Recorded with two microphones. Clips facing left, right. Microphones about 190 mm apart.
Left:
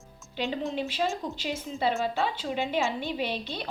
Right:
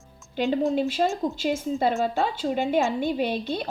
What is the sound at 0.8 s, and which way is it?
A woman's voice, 45° right (ahead or behind).